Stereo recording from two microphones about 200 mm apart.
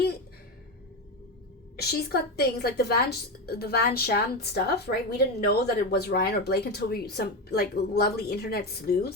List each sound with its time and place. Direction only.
1.7 s a woman's voice: 50° left (ahead or behind)